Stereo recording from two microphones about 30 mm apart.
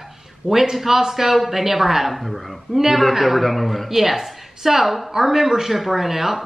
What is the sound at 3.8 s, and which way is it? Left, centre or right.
A woman's voice, centre.